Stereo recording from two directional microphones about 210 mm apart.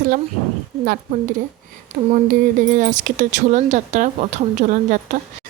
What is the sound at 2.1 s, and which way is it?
A woman's voice, 40° right (ahead or behind).